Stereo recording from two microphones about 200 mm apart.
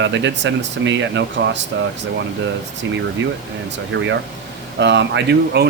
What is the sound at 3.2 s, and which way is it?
Speech, 65° right (ahead or behind).